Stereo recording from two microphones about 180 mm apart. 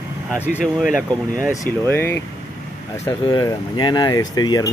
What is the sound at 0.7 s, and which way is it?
Speech, centre (ahead or behind).